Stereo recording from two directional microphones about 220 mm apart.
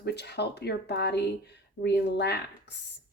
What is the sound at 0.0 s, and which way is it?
A woman's voice, 50° left (ahead or behind).